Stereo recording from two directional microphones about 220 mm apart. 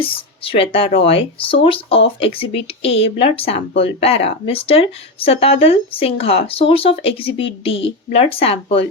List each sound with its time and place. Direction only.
0.0 s speech: 25° left (ahead or behind)